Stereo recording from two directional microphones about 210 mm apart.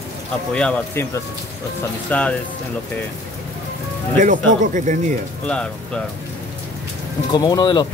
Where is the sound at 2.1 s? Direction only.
5° left (ahead or behind).